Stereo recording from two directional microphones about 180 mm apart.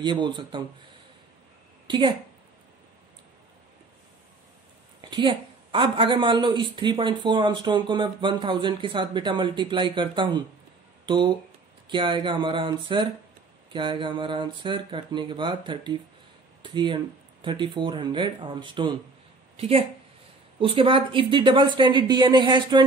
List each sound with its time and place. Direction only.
0.0 s speech: 25° right (ahead or behind)
1.9 s a woman's voice: 25° right (ahead or behind)
5.1 s a woman's voice: 25° right (ahead or behind)